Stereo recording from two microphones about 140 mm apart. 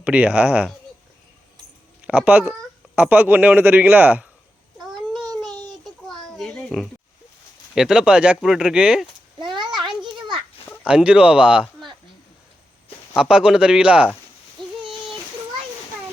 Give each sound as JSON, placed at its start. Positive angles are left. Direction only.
{"t": 0.0, "sound": "speech", "side_deg": -10}
{"t": 2.0, "sound": "speech", "side_deg": -10}
{"t": 6.1, "sound": "a sound", "side_deg": 0}
{"t": 7.8, "sound": "speech", "side_deg": -5}
{"t": 9.4, "sound": "a sound", "side_deg": -35}
{"t": 10.8, "sound": "speech", "side_deg": -10}
{"t": 13.1, "sound": "speech", "side_deg": -5}